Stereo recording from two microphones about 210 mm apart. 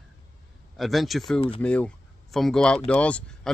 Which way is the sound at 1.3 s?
25° left (ahead or behind).